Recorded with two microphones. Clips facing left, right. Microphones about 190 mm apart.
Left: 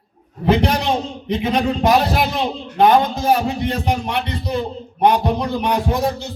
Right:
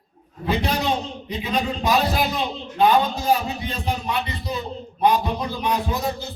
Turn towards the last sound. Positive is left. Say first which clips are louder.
# left 5 dB
turn(degrees=75)  # may be behind; listen again after turning